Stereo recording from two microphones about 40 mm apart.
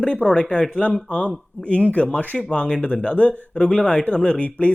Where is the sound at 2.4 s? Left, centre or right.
Left.